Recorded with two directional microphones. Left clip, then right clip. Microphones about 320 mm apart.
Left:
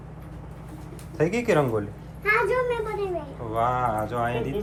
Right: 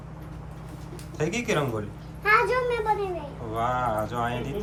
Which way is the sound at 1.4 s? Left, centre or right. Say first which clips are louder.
Left 4 dB; centre.